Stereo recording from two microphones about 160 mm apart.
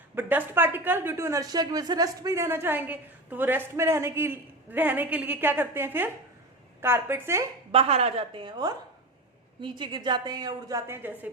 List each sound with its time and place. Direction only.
0.2 s speech: 15° right (ahead or behind)
7.7 s a woman's voice: 40° right (ahead or behind); by 11.3 s 10° right (ahead or behind)